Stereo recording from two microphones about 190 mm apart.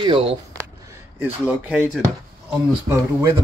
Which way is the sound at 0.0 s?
30° right (ahead or behind).